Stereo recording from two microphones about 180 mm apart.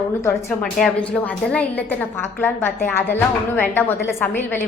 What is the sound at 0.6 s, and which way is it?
A woman's voice, centre (ahead or behind).